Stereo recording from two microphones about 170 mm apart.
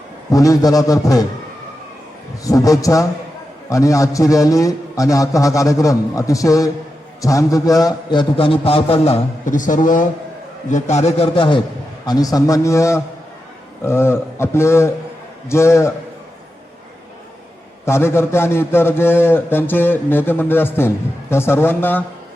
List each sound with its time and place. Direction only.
0.3 s a man's voice: 20° left (ahead or behind)
2.4 s a man's voice: 20° left (ahead or behind)
17.8 s a man's voice: 15° left (ahead or behind)